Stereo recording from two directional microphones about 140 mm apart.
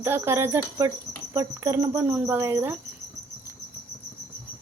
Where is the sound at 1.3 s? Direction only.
20° right (ahead or behind).